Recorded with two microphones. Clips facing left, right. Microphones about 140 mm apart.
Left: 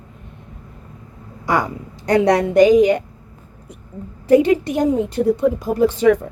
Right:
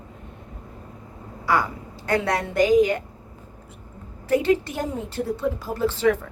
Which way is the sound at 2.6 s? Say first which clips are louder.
Left 5 dB; 75° left (ahead or behind).